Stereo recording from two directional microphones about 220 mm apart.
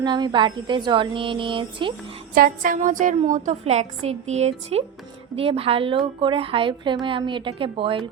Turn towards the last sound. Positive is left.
turn(degrees=-25)  # may be behind; listen again after turning